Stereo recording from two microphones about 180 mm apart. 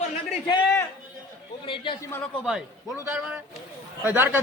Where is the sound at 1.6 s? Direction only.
25° left (ahead or behind).